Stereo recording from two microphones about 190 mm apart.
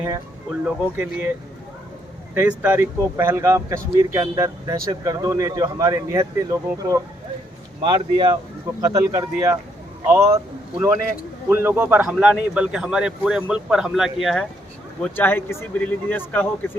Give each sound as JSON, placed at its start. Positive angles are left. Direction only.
{"t": 0.6, "sound": "speech", "side_deg": -10}
{"t": 2.3, "sound": "speech", "side_deg": -10}
{"t": 7.8, "sound": "a man's voice", "side_deg": -25}